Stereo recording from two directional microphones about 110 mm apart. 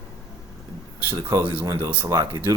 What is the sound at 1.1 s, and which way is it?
Speech, 25° right (ahead or behind).